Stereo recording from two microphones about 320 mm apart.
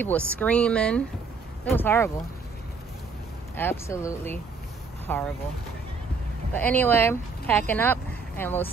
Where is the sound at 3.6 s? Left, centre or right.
Centre.